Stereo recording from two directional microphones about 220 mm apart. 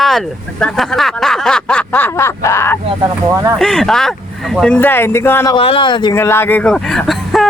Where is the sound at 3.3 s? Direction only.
15° right (ahead or behind).